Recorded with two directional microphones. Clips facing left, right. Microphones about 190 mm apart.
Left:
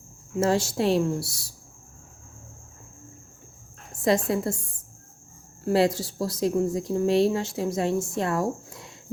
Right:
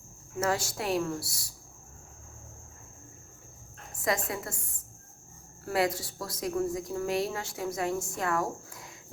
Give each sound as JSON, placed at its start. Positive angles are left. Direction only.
{"t": 0.3, "sound": "speech", "side_deg": 25}
{"t": 4.0, "sound": "speech", "side_deg": 25}
{"t": 5.6, "sound": "speech", "side_deg": 25}